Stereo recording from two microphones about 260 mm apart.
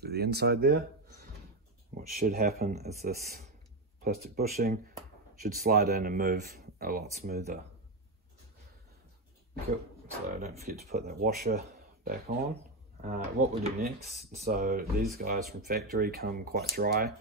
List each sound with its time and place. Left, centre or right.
0.0 s speech: right
2.0 s speech: right
10.2 s speech: right